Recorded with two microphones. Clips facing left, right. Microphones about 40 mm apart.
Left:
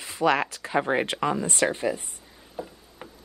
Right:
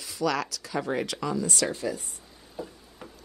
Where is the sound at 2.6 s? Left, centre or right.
Left.